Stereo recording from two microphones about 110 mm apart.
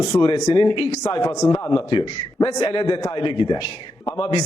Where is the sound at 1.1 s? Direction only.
35° left (ahead or behind).